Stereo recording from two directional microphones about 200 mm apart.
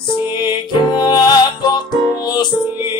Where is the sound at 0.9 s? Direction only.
20° left (ahead or behind).